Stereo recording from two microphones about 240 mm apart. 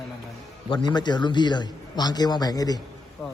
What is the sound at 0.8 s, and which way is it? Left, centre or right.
A man's voice, centre.